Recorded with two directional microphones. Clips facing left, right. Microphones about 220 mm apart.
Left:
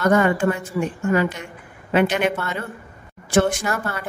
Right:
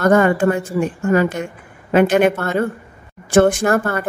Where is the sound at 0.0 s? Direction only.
45° right (ahead or behind).